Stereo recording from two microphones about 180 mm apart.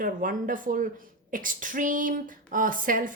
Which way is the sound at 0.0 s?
50° right (ahead or behind).